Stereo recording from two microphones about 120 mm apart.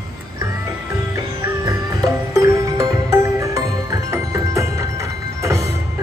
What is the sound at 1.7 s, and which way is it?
Music, 25° right (ahead or behind).